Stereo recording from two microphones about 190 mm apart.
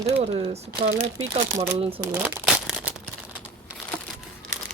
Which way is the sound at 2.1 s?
10° right (ahead or behind).